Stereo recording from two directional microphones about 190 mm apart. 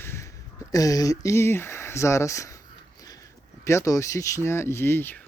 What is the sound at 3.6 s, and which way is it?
Speech, 15° left (ahead or behind).